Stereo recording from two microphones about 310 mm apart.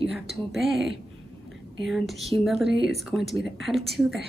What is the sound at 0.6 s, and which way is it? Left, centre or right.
A woman's voice, centre.